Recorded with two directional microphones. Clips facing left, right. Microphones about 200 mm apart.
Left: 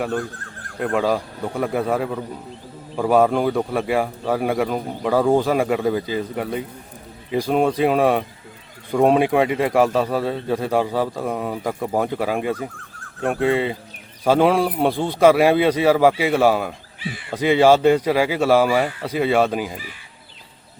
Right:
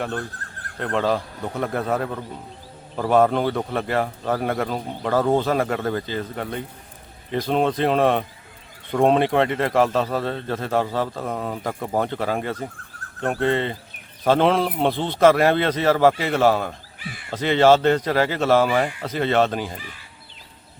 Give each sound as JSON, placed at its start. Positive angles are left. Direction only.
{"t": 0.8, "sound": "a man's voice", "side_deg": 10}
{"t": 17.0, "sound": "speech", "side_deg": -50}
{"t": 17.3, "sound": "a man's voice", "side_deg": 10}